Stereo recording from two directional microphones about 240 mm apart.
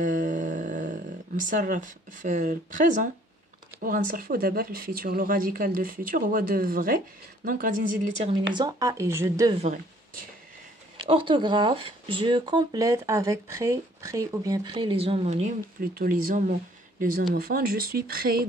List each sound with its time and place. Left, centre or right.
0.0 s a sound: right
1.5 s speech: right
8.3 s a woman's voice: centre
9.6 s speech: right
11.0 s speech: centre; by 18.5 s right